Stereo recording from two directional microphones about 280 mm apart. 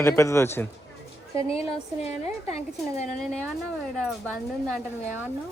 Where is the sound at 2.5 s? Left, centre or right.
Left.